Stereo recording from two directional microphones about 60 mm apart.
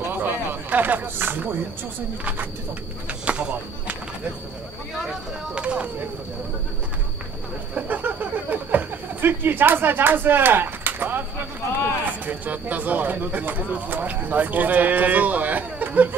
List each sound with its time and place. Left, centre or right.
0.1 s a sound: right
3.1 s speech: right
4.9 s speech: centre
5.6 s speech: centre
7.7 s speech: right
12.3 s speech: right